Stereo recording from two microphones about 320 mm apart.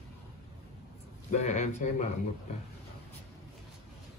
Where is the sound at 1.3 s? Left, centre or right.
Left.